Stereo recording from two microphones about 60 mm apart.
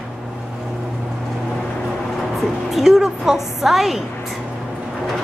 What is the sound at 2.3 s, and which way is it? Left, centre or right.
A woman's voice, centre.